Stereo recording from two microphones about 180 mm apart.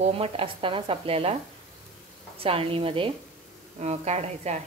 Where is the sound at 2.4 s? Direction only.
30° right (ahead or behind).